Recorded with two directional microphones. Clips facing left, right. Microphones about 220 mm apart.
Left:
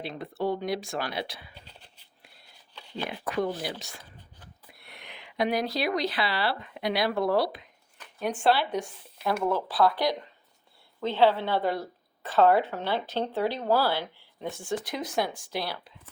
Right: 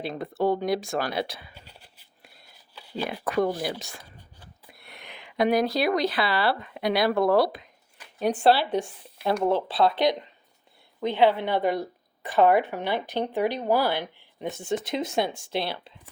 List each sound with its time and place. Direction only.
0.0 s speech: 45° right (ahead or behind)
1.5 s a sound: 10° right (ahead or behind)
3.2 s speech: 50° right (ahead or behind)
4.9 s speech: 45° right (ahead or behind)
8.2 s a woman's voice: 35° right (ahead or behind)